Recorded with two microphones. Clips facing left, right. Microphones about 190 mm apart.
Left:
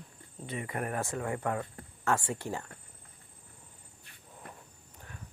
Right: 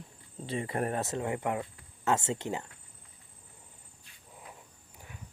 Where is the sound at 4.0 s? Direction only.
60° left (ahead or behind).